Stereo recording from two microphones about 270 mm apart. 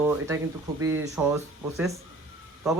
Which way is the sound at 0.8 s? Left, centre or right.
Centre.